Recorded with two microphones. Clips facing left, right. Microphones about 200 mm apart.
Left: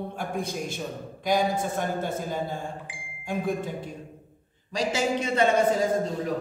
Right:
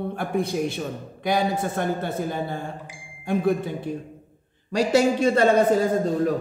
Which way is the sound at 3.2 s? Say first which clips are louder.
Right 6 dB; 65° right (ahead or behind).